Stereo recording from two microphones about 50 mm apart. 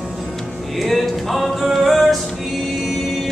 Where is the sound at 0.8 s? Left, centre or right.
Centre.